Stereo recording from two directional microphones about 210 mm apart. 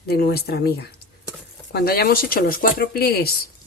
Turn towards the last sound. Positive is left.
turn(degrees=45)  # may be behind; listen again after turning